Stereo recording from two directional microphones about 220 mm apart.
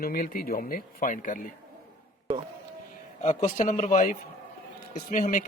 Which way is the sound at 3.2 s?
30° left (ahead or behind).